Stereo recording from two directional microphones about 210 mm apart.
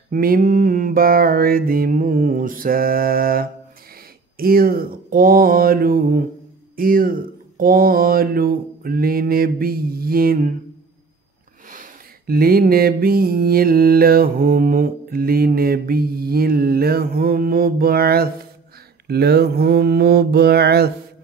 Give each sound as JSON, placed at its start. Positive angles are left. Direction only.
{"t": 0.1, "sound": "mantra", "side_deg": -40}
{"t": 6.8, "sound": "speech", "side_deg": -45}
{"t": 11.7, "sound": "mantra", "side_deg": -45}